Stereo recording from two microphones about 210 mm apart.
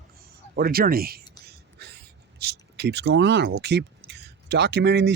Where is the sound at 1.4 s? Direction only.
50° right (ahead or behind).